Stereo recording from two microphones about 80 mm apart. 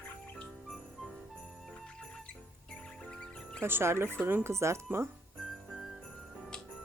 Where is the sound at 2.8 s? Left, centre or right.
Centre.